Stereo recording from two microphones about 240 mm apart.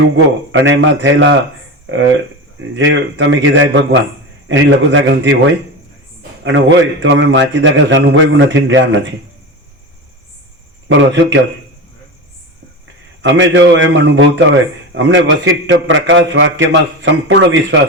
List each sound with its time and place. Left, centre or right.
0.5 s a man's voice: right
6.4 s a man's voice: right
10.8 s a man's voice: right
13.2 s a man's voice: right